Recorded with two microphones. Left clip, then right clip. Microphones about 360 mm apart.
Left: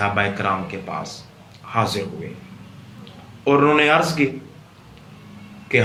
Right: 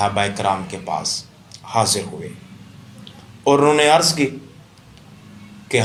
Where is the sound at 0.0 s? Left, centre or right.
Centre.